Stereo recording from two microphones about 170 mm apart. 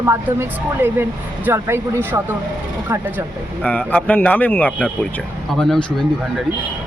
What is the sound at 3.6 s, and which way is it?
Speech, 10° left (ahead or behind).